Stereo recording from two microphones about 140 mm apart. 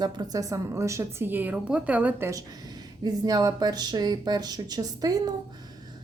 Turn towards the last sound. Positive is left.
turn(degrees=-25)  # may be behind; listen again after turning